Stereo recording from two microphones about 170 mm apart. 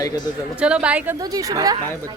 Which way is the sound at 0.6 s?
5° right (ahead or behind).